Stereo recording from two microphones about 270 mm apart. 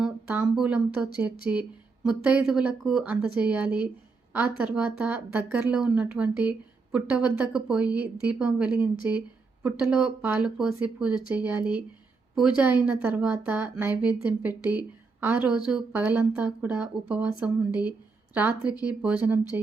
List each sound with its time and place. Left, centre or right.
0.0 s a woman's voice: centre